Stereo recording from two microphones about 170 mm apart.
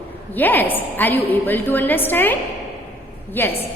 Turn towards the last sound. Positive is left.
turn(degrees=10)  # may be behind; listen again after turning